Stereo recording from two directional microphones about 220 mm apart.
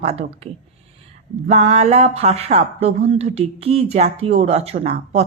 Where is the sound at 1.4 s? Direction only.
30° right (ahead or behind).